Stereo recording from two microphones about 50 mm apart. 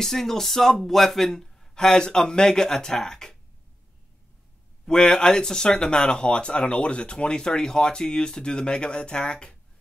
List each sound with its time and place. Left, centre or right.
0.0 s speech: centre
4.8 s speech: centre